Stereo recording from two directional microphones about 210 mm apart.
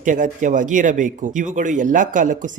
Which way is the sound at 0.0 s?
40° right (ahead or behind).